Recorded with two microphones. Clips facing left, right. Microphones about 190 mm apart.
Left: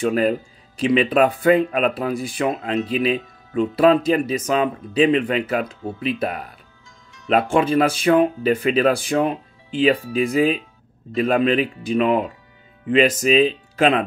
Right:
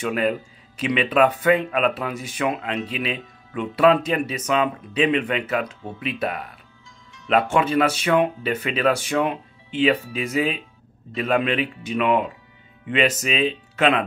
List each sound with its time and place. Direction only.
0.0 s speech: 40° left (ahead or behind)